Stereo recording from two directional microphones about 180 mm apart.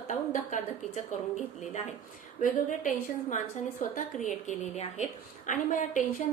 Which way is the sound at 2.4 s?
45° left (ahead or behind).